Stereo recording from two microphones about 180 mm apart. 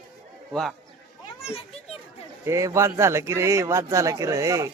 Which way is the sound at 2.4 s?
15° right (ahead or behind).